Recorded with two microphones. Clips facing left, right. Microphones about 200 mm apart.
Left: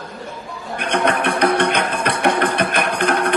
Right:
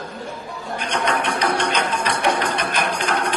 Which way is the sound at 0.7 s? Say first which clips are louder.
Left 4 dB; 55° left (ahead or behind).